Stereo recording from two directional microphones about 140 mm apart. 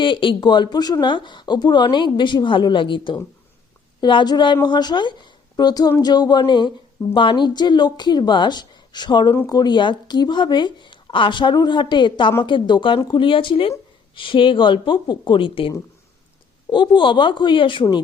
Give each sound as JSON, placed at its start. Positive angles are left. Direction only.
{"t": 0.0, "sound": "speech", "side_deg": 35}